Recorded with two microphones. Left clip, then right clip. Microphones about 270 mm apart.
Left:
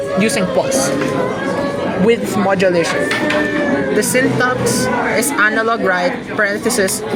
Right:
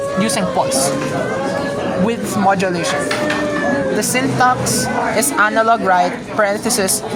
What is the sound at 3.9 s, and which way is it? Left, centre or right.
Speech, centre.